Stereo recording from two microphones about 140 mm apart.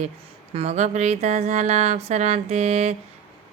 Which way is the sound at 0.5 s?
45° right (ahead or behind).